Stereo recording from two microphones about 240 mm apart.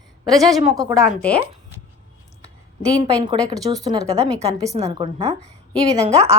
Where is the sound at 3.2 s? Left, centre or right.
Centre.